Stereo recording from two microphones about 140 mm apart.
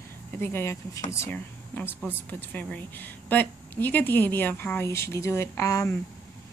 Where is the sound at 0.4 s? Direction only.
15° left (ahead or behind).